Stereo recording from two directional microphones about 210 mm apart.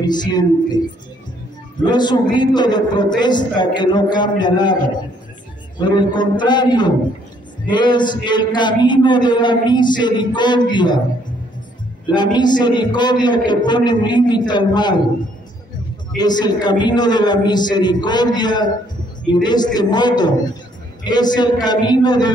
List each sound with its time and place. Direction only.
0.0 s a man's voice: 20° left (ahead or behind)
5.8 s a man's voice: 20° left (ahead or behind)
12.1 s a man's voice: 20° left (ahead or behind)
16.2 s a man's voice: 20° left (ahead or behind)